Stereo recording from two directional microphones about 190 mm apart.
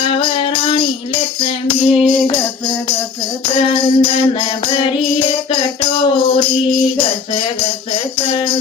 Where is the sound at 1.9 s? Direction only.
Centre (ahead or behind).